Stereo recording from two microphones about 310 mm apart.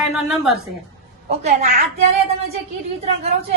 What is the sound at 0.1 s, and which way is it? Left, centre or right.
Speech, centre.